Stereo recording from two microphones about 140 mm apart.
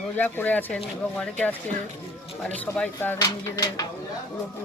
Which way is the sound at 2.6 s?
10° left (ahead or behind).